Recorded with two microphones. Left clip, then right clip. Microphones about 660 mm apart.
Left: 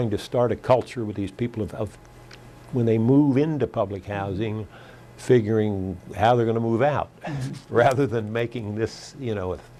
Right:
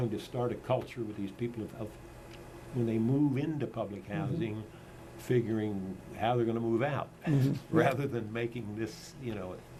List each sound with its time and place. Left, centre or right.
0.2 s speech: left